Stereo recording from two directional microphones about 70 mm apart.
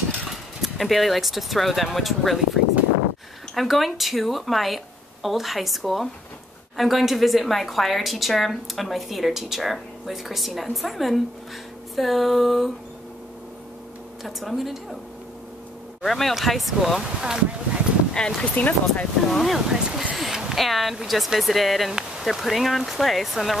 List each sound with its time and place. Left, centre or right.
0.3 s a woman's voice: centre
14.2 s a woman's voice: centre
16.1 s a woman's voice: centre
17.2 s speech: centre
18.1 s speech: centre
19.3 s a woman's voice: centre
19.8 s a sound: centre
20.2 s speech: centre